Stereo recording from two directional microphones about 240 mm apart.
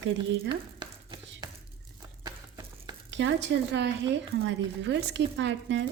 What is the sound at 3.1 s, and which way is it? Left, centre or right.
A woman's voice, right.